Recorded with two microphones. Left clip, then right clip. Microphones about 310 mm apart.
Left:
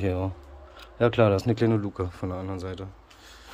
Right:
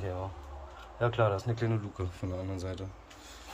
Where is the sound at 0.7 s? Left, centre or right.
Left; by 3.3 s centre.